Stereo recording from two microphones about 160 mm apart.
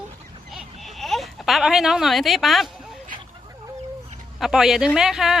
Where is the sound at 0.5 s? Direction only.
Centre (ahead or behind).